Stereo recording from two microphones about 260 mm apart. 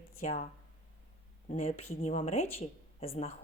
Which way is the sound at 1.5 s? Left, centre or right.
Left.